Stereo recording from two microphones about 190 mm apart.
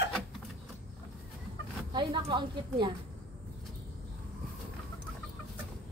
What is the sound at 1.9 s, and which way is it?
A woman's voice, 25° right (ahead or behind).